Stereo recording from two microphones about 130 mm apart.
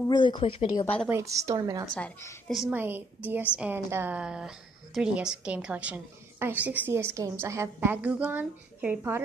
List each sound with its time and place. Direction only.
0.1 s speech: 40° left (ahead or behind)
1.1 s a woman's voice: 25° right (ahead or behind)
2.0 s a woman's voice: 10° left (ahead or behind)
2.4 s a woman's voice: centre (ahead or behind)
2.7 s a woman's voice: 15° right (ahead or behind)
4.2 s a woman's voice: 5° right (ahead or behind)